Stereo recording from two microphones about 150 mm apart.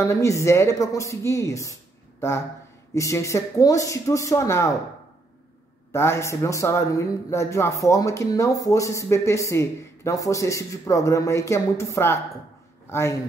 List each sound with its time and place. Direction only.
0.0 s speech: 20° left (ahead or behind)
5.9 s a man's voice: 15° left (ahead or behind)